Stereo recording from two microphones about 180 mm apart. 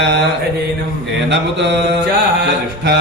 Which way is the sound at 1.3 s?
75° right (ahead or behind).